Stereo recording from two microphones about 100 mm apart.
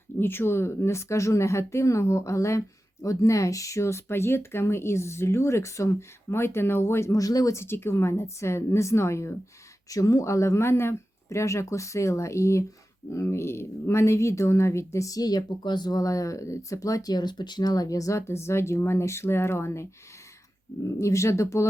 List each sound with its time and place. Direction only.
0.2 s speech: 20° left (ahead or behind)